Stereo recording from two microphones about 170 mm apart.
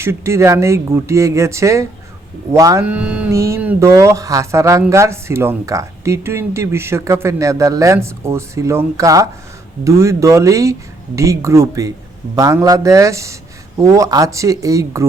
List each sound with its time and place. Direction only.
0.0 s speech: 15° right (ahead or behind)
2.8 s speech: 5° right (ahead or behind)
3.3 s speech: 15° right (ahead or behind)